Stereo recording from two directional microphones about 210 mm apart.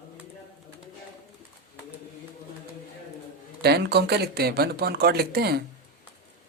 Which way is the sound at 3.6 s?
50° right (ahead or behind).